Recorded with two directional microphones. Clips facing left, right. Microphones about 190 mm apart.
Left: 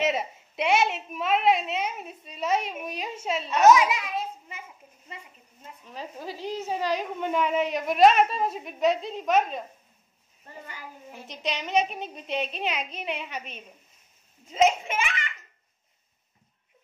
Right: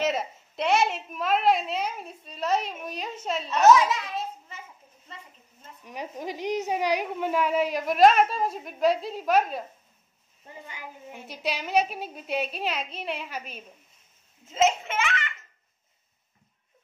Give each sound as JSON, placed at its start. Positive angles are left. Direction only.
{"t": 0.0, "sound": "a woman's voice", "side_deg": 5}
{"t": 5.9, "sound": "a woman's voice", "side_deg": -15}
{"t": 10.4, "sound": "a child's voice", "side_deg": -15}
{"t": 14.4, "sound": "speech", "side_deg": 15}